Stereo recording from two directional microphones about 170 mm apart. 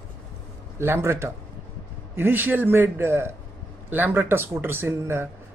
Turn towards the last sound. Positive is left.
turn(degrees=-15)  # may be behind; listen again after turning